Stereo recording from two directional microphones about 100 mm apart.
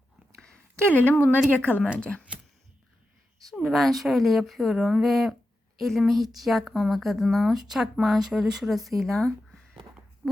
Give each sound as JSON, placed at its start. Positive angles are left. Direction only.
{"t": 0.4, "sound": "a sound", "side_deg": 15}
{"t": 1.5, "sound": "a woman's voice", "side_deg": 15}
{"t": 3.5, "sound": "speech", "side_deg": 0}